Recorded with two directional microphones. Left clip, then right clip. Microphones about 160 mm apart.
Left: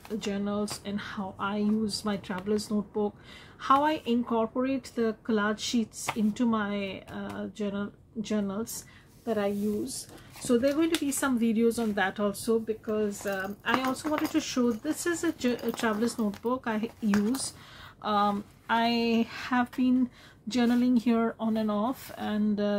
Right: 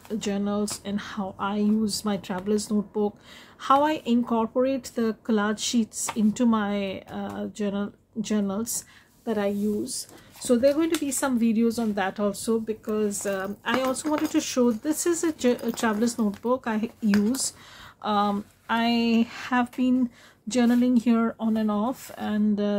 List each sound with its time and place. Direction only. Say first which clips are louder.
0.1 s speech: right 4 dB; 40° right (ahead or behind)
12.6 s speech: right 3 dB; 45° right (ahead or behind)
18.0 s speech: right 2 dB; 25° right (ahead or behind)